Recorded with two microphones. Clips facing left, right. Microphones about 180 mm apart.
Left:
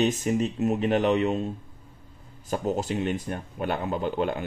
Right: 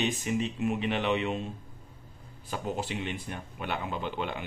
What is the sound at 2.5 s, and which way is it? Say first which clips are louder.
Speech: left 6 dB; 45° left (ahead or behind).